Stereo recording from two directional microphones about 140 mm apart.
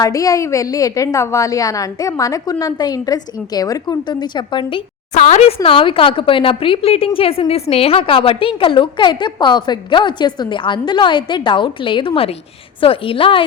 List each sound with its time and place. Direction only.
0.0 s a woman's voice: 25° left (ahead or behind)
5.1 s speech: 55° left (ahead or behind)
5.6 s a woman's voice: 40° left (ahead or behind)